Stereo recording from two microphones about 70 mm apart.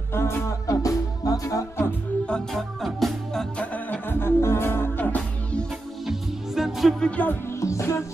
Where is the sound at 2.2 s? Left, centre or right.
Centre.